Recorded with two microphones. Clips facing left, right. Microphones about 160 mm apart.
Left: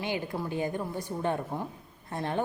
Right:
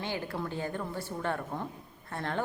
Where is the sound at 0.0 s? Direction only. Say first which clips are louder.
Left 2 dB; 15° left (ahead or behind).